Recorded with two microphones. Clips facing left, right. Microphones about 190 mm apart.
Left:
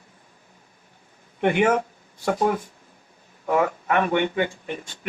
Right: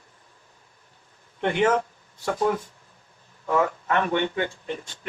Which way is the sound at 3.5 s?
15° left (ahead or behind).